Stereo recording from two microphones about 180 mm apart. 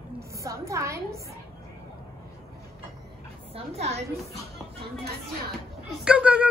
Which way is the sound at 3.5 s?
35° right (ahead or behind).